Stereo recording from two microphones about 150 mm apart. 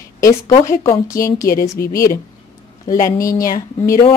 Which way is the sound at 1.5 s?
80° left.